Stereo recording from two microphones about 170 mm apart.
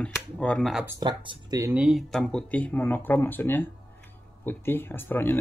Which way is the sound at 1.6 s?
10° right (ahead or behind).